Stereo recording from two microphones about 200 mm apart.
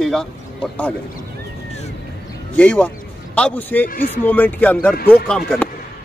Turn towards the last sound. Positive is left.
turn(degrees=5)  # may be behind; listen again after turning